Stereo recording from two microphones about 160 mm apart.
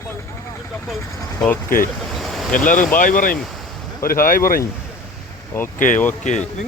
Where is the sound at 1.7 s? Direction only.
60° left (ahead or behind).